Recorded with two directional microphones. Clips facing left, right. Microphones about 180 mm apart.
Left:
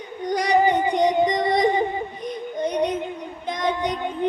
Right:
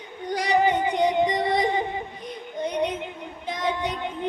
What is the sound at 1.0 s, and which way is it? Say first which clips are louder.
Music: left 2 dB; 10° right (ahead or behind).